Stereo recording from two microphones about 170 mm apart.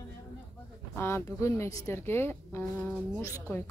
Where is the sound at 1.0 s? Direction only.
15° left (ahead or behind).